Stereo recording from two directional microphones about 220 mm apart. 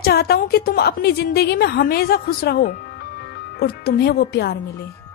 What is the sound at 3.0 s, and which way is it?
Music, 45° left (ahead or behind).